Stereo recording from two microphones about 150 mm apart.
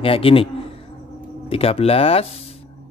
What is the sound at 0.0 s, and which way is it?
Speech, 35° left (ahead or behind).